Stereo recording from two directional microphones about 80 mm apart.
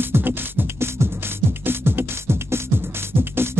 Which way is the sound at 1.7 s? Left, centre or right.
Right.